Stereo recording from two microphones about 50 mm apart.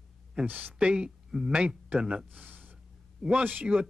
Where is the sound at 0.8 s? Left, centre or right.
Centre.